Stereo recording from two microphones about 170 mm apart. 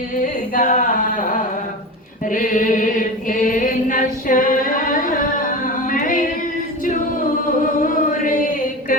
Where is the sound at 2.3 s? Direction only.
50° left (ahead or behind).